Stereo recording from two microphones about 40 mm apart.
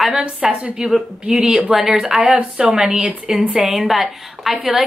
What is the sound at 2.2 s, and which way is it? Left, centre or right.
A woman's voice, right.